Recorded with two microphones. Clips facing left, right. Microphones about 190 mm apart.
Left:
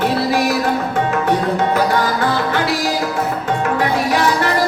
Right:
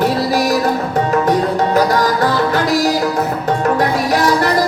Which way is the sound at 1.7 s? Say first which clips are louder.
Right 3 dB; 40° right (ahead or behind).